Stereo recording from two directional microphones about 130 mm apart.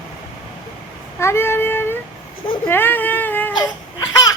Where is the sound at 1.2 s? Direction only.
20° left (ahead or behind).